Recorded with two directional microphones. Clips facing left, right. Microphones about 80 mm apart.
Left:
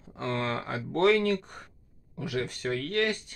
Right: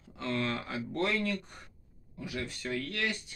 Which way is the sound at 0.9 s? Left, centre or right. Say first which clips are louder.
Left 9 dB; left.